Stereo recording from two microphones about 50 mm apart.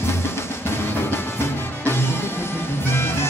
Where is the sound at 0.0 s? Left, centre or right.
Left.